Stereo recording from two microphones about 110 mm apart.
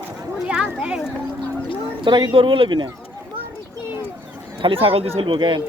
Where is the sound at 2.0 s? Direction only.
45° right (ahead or behind).